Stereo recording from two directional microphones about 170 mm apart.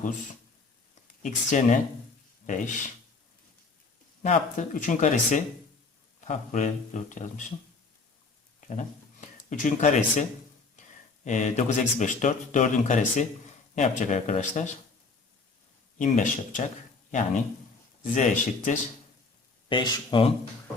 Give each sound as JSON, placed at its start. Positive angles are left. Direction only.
{"t": 1.2, "sound": "speech", "side_deg": 45}
{"t": 4.2, "sound": "speech", "side_deg": 45}
{"t": 9.5, "sound": "speech", "side_deg": 45}
{"t": 11.3, "sound": "speech", "side_deg": 45}
{"t": 16.0, "sound": "speech", "side_deg": 50}
{"t": 19.6, "sound": "speech", "side_deg": 25}